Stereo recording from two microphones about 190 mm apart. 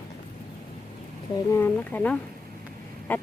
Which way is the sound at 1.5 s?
10° left (ahead or behind).